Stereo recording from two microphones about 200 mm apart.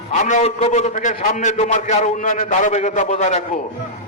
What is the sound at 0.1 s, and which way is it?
A man's voice, 35° left (ahead or behind).